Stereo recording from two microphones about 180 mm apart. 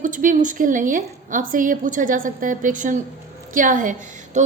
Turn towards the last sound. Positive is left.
turn(degrees=-45)  # may be behind; listen again after turning